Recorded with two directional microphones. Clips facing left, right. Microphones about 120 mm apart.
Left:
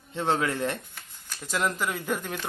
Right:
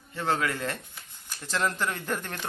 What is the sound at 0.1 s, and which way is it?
Speech, 20° left (ahead or behind).